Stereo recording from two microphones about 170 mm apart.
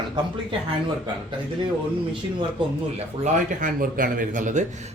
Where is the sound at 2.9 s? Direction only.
50° right (ahead or behind).